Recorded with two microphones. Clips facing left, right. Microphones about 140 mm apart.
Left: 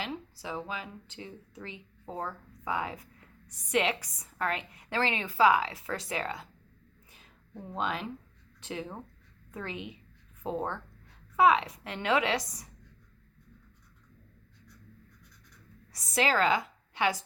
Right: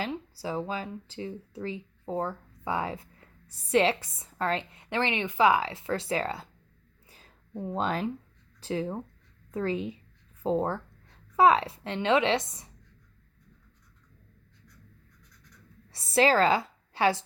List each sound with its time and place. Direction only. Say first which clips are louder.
0.1 s a woman's voice: right 4 dB; 35° right (ahead or behind)
7.7 s a woman's voice: right 4 dB; 40° right (ahead or behind); by 12.7 s 25° right (ahead or behind)
15.9 s a woman's voice: right 5 dB; 30° right (ahead or behind)